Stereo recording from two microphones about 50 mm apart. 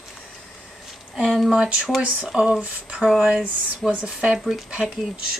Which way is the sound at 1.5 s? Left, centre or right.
Centre.